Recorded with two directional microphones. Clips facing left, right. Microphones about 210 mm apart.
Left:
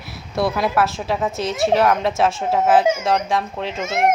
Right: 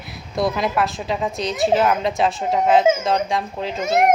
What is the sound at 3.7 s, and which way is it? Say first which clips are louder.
Speech: right 7 dB; 35° right (ahead or behind).